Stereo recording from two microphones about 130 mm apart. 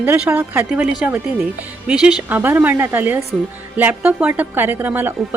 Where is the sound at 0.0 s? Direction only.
15° right (ahead or behind).